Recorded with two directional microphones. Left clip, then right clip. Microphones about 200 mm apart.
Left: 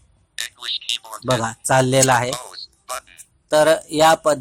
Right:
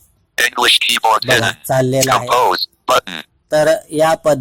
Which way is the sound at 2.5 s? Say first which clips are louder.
Right 17 dB; 35° right (ahead or behind).